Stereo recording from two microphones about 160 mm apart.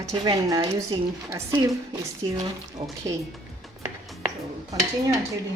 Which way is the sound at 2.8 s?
35° right (ahead or behind).